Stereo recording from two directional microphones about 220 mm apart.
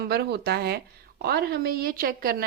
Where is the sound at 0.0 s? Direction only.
50° right (ahead or behind).